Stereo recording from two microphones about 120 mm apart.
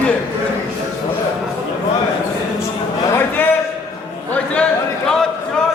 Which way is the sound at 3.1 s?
15° left (ahead or behind).